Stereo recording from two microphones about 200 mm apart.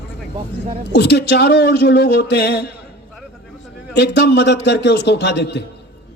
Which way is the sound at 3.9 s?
55° left (ahead or behind).